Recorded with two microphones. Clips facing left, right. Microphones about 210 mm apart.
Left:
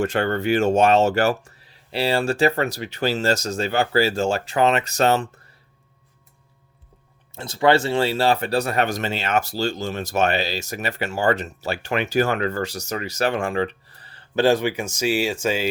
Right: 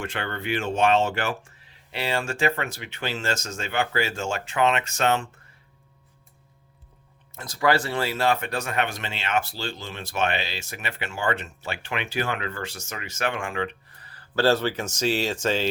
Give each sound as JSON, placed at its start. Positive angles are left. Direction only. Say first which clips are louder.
{"t": 0.0, "sound": "speech", "louder": "left 10 dB", "side_deg": 40}
{"t": 7.3, "sound": "speech", "louder": "left 5 dB", "side_deg": 25}
{"t": 14.4, "sound": "speech", "louder": "left 3 dB", "side_deg": 15}